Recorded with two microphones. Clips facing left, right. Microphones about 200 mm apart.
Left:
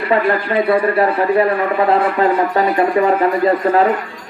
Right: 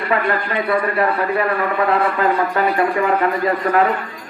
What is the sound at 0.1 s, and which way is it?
Speech, 30° left (ahead or behind).